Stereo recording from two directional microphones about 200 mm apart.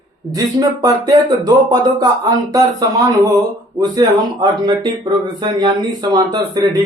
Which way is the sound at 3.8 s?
20° right (ahead or behind).